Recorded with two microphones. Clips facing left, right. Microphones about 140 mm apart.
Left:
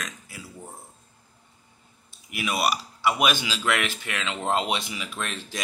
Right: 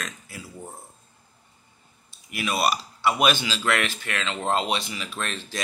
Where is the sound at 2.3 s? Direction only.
15° left (ahead or behind).